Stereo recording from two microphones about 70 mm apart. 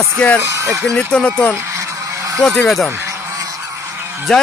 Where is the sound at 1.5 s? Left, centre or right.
Right.